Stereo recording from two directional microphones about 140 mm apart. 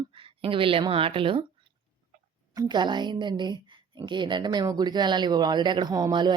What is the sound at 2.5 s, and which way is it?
A woman's voice, 30° right (ahead or behind).